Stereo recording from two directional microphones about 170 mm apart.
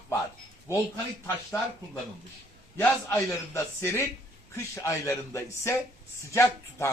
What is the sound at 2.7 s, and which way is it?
A man's voice, 15° left (ahead or behind).